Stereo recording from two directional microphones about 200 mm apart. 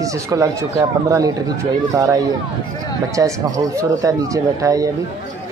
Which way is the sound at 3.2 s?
15° right (ahead or behind).